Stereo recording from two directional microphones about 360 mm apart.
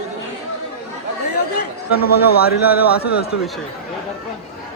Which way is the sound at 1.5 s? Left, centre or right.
Left.